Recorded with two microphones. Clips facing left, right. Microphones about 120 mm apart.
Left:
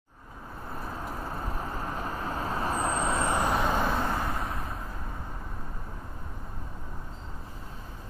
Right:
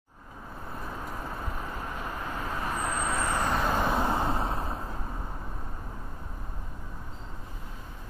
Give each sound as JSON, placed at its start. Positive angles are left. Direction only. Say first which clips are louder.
{"t": 1.4, "sound": "vehicle", "louder": "left 2 dB", "side_deg": 35}
{"t": 3.7, "sound": "vehicle", "louder": "right 1 dB", "side_deg": -5}
{"t": 4.0, "sound": "vehicle", "louder": "right 3 dB", "side_deg": -25}